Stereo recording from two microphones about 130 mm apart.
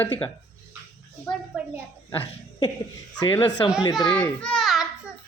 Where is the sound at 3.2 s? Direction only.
35° left (ahead or behind).